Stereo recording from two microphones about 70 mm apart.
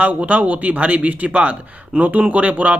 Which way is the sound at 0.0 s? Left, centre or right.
Right.